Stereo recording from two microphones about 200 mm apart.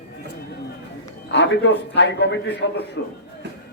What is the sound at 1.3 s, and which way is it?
A man's voice, 60° left (ahead or behind).